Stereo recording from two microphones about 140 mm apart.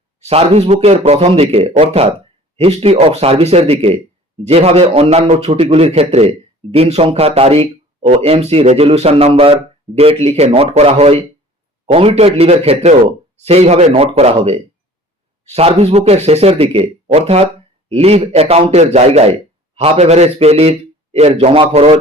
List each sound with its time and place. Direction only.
0.3 s a man's voice: 45° right (ahead or behind)